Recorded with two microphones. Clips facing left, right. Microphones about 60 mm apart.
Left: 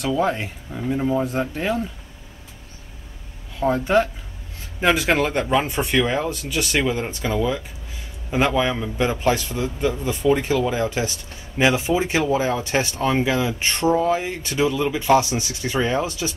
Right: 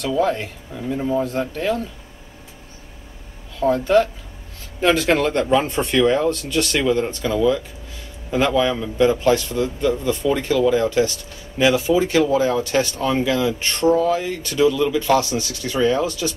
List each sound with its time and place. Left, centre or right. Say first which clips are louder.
0.2 s a man's voice: right 2 dB; centre
3.5 s a man's voice: right 2 dB; centre